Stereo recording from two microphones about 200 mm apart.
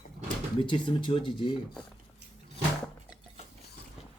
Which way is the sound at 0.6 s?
25° left (ahead or behind).